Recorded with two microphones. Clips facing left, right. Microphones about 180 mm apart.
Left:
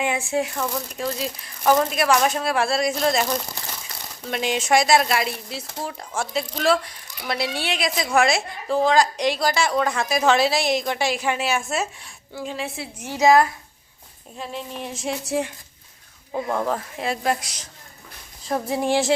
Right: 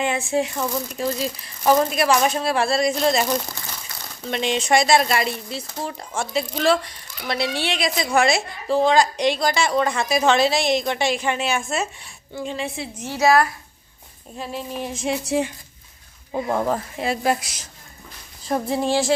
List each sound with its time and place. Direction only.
0.0 s speech: 10° left (ahead or behind)
14.3 s speech: 5° right (ahead or behind)
18.7 s speech: 15° left (ahead or behind)